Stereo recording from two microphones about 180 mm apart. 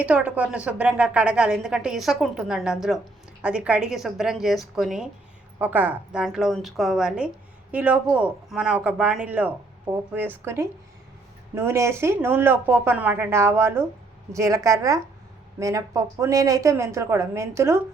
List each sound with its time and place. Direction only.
0.0 s a woman's voice: 5° right (ahead or behind)